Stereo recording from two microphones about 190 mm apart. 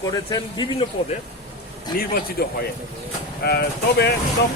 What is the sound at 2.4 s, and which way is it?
A man's voice, 55° left (ahead or behind).